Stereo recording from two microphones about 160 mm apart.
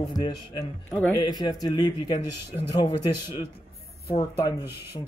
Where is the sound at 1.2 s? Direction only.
25° left (ahead or behind).